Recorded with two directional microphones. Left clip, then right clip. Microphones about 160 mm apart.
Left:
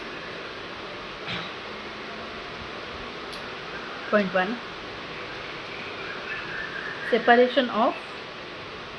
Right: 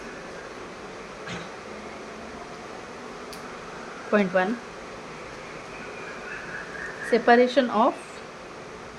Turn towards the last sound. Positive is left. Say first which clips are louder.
# even
turn(degrees=-30)  # may be behind; listen again after turning